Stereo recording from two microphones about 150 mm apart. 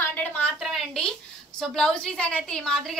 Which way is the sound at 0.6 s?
Centre (ahead or behind).